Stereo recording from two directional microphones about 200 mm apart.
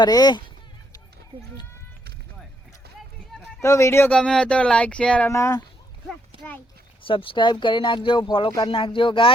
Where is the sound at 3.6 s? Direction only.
15° left (ahead or behind).